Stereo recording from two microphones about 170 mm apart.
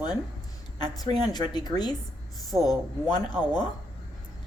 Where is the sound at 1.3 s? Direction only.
25° left (ahead or behind).